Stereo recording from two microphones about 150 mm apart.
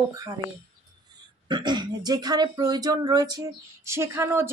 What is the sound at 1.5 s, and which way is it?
Speech, 30° right (ahead or behind).